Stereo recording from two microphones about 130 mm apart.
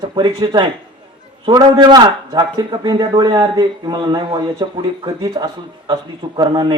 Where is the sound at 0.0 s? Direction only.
35° right (ahead or behind).